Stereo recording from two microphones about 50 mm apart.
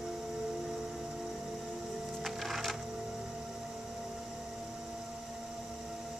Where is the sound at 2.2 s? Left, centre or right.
Centre.